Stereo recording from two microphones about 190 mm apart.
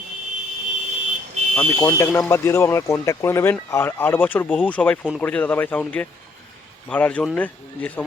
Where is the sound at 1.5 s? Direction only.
15° left (ahead or behind).